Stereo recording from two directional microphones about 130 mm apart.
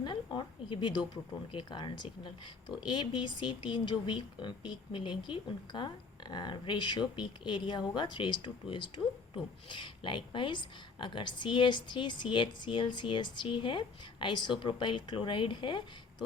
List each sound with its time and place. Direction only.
0.0 s a woman's voice: 35° left (ahead or behind)